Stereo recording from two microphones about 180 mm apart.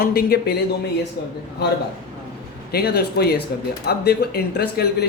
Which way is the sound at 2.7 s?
60° left (ahead or behind).